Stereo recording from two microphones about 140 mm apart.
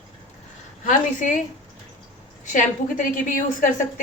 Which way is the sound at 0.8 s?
70° left (ahead or behind).